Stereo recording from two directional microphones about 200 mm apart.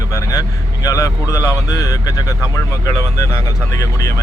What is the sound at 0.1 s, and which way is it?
Speech, 15° left (ahead or behind).